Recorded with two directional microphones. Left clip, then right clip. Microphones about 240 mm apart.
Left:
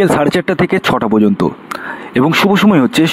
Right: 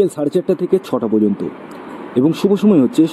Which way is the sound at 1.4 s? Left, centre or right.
Left.